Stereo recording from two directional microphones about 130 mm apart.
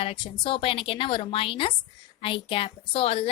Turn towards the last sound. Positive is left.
turn(degrees=45)  # may be behind; listen again after turning